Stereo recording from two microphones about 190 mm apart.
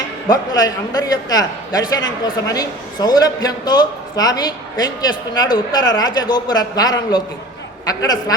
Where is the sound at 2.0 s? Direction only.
80° left.